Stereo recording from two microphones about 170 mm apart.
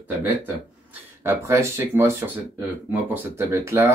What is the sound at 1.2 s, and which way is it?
Speech, 15° right (ahead or behind).